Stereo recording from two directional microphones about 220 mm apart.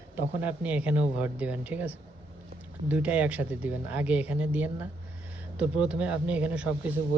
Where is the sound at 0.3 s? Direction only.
5° right (ahead or behind).